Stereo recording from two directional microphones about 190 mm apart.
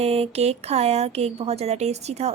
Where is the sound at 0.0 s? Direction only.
30° right (ahead or behind).